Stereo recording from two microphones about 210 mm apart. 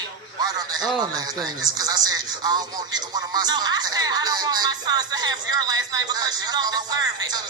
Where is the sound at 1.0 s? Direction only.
20° right (ahead or behind).